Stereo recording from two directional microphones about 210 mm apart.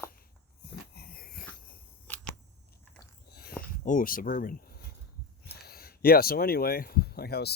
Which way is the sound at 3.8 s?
40° left (ahead or behind).